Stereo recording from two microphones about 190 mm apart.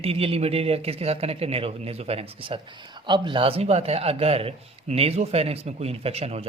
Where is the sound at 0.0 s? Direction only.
30° right (ahead or behind).